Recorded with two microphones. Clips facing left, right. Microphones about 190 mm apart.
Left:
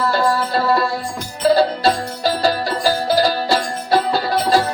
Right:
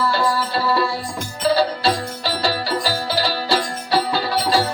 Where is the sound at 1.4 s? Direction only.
50° left (ahead or behind).